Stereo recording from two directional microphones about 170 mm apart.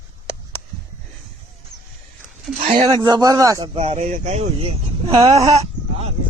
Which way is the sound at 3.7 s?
40° right (ahead or behind).